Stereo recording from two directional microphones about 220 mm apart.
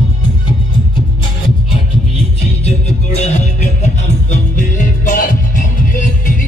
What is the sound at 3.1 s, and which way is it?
Music, 30° left (ahead or behind).